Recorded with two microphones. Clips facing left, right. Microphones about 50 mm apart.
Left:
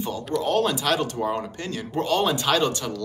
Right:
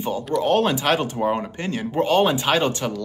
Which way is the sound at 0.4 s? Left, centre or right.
Right.